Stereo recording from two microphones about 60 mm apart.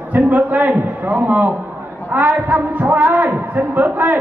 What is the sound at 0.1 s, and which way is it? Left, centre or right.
A man's voice, right.